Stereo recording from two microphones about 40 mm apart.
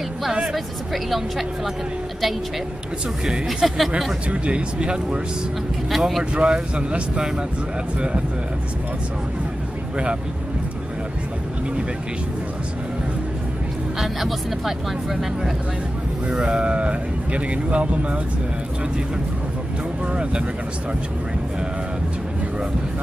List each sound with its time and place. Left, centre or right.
0.3 s speech: centre
3.4 s speech: centre
4.3 s speech: right
5.9 s speech: centre
6.3 s speech: right
13.9 s speech: centre
16.3 s speech: centre
16.5 s speech: right
20.1 s speech: right